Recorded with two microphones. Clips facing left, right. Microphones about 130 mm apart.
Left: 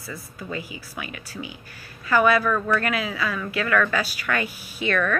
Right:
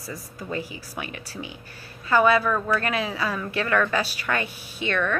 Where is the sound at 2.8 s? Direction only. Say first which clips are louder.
Even; 30° right (ahead or behind).